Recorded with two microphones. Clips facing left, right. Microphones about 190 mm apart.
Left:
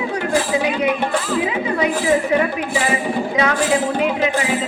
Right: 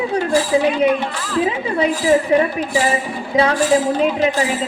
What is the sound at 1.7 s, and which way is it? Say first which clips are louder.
Speech: right 3 dB; 30° right (ahead or behind).